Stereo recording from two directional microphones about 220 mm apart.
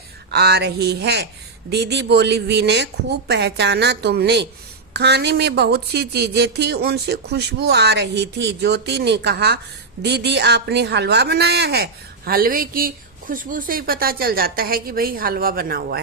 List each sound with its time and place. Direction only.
0.3 s a woman's voice: 50° right (ahead or behind)